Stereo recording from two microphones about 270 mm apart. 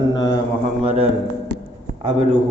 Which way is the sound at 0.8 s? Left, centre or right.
Right.